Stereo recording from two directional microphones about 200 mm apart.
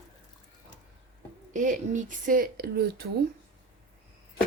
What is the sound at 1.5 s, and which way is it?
Speech, 40° right (ahead or behind).